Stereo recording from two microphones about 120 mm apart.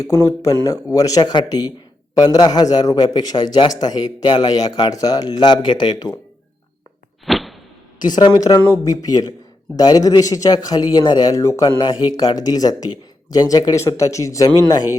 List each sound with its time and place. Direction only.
0.0 s a man's voice: 25° left (ahead or behind)
7.3 s a sound: centre (ahead or behind)
8.0 s a man's voice: 35° left (ahead or behind)